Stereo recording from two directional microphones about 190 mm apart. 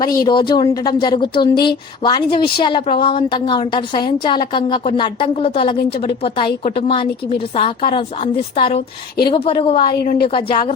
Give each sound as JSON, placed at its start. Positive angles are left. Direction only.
{"t": 0.0, "sound": "a woman's voice", "side_deg": 20}